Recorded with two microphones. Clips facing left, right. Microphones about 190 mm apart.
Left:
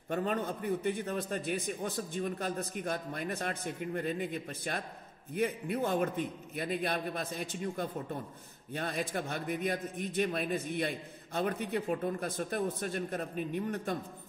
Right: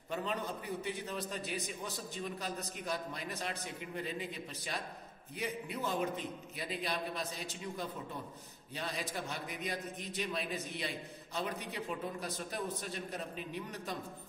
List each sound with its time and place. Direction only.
0.1 s a man's voice: 50° left (ahead or behind)